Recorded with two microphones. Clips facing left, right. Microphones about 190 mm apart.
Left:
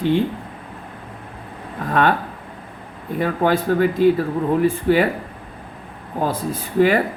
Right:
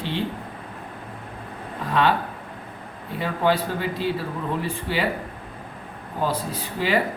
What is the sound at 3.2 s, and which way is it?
Speech, 50° left (ahead or behind).